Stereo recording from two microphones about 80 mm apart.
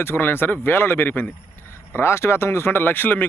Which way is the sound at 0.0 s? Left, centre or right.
Left.